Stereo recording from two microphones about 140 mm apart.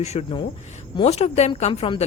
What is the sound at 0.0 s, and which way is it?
A woman's voice, 50° left (ahead or behind).